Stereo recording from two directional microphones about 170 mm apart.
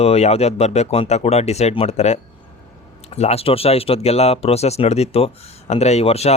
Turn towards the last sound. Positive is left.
turn(degrees=40)  # may be behind; listen again after turning